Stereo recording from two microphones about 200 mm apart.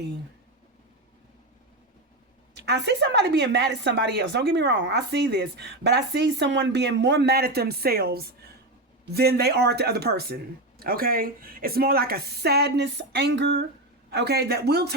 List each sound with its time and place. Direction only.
2.6 s a woman's voice: 60° right (ahead or behind)